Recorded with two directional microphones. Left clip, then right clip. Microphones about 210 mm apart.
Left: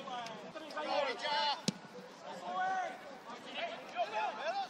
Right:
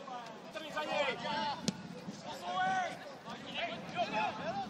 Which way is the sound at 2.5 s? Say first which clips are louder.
Right 2 dB; 25° right (ahead or behind).